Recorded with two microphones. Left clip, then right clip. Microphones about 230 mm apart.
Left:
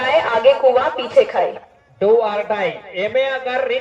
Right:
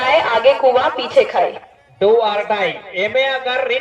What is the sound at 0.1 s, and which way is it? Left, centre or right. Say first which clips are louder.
A woman's voice: right 1 dB; right.